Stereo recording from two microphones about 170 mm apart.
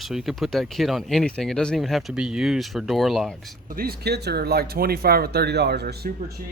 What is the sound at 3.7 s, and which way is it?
Speech, 65° right (ahead or behind).